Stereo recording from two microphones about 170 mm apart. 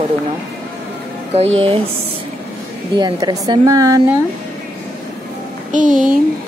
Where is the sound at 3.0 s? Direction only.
25° right (ahead or behind).